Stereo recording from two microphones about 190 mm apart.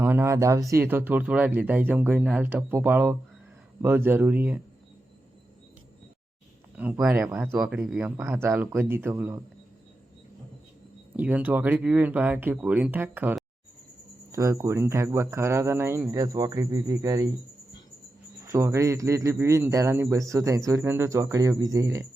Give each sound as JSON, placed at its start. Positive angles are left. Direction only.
{"t": 0.0, "sound": "speech", "side_deg": -10}
{"t": 7.0, "sound": "speech", "side_deg": -10}
{"t": 11.2, "sound": "speech", "side_deg": -10}
{"t": 18.4, "sound": "speech", "side_deg": -15}